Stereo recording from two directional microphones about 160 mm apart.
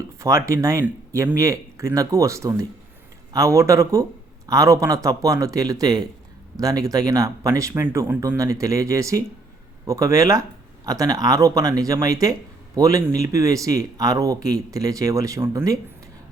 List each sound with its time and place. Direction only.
0.2 s speech: 20° right (ahead or behind)